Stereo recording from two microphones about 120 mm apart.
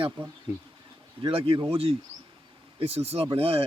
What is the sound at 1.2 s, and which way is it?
Speech, 50° right (ahead or behind).